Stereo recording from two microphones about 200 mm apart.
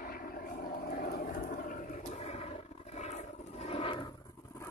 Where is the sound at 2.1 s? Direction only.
30° left (ahead or behind).